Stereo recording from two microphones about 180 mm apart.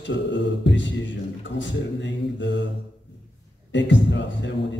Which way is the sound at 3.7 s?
90° left.